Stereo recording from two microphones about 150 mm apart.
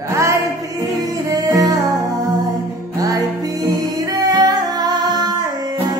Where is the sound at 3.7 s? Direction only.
25° right (ahead or behind).